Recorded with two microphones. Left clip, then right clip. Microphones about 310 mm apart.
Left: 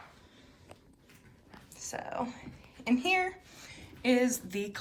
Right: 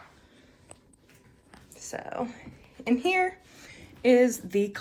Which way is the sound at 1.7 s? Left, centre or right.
Centre.